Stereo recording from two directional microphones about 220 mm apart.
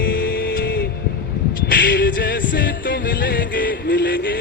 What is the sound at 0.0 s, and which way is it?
Music, 45° left (ahead or behind).